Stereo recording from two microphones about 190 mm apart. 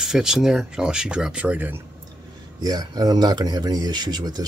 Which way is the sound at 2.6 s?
20° right (ahead or behind).